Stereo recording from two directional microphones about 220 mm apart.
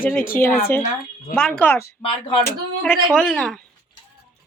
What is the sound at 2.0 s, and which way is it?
Speech, 25° left (ahead or behind).